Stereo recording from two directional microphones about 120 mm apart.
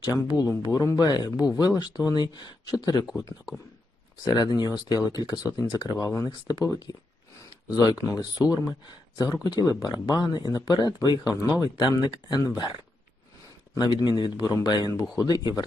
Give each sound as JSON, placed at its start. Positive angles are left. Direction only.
{"t": 0.3, "sound": "speech", "side_deg": 30}
{"t": 4.2, "sound": "speech", "side_deg": 35}
{"t": 13.7, "sound": "speech", "side_deg": 35}